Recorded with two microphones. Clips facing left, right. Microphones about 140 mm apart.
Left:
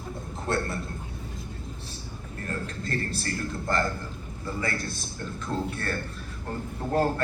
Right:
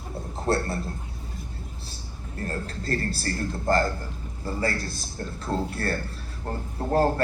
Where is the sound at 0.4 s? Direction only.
35° right (ahead or behind).